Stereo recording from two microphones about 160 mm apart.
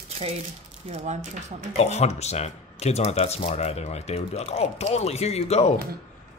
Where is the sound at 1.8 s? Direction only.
40° left (ahead or behind).